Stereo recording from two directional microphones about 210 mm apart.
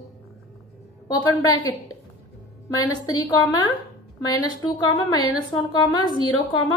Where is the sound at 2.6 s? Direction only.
15° left (ahead or behind).